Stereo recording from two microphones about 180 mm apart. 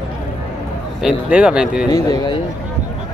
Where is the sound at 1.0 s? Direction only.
5° right (ahead or behind).